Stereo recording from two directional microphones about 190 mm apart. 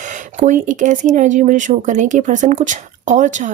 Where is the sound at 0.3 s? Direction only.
40° right (ahead or behind).